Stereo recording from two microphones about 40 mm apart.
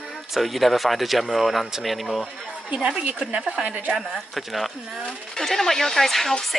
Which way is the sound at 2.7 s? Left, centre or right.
Right.